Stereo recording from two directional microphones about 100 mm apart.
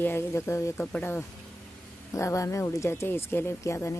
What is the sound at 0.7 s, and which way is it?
Speech, 20° left (ahead or behind).